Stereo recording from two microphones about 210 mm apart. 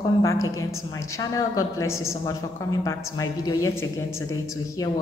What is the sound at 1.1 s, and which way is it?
A man's voice, 15° left (ahead or behind).